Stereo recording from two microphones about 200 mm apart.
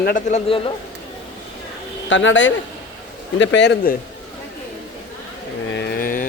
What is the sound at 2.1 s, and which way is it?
A man's voice, 70° left (ahead or behind).